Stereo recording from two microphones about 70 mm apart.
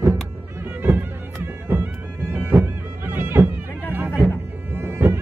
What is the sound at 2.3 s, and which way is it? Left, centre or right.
Bagpipes, right.